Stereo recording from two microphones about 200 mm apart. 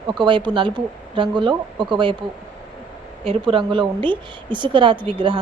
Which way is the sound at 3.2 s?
25° right (ahead or behind).